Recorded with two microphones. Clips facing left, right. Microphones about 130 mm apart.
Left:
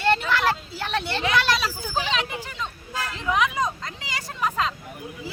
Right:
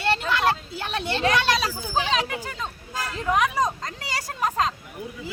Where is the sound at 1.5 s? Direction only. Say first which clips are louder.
Right 2 dB; 40° right (ahead or behind).